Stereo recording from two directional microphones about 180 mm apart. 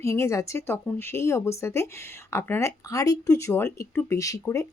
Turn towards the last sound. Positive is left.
turn(degrees=15)  # may be behind; listen again after turning